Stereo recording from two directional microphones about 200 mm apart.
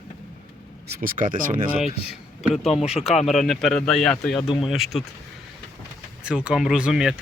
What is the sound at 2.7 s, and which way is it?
Speech, 30° left (ahead or behind).